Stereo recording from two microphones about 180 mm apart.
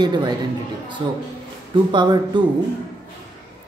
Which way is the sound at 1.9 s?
25° right (ahead or behind).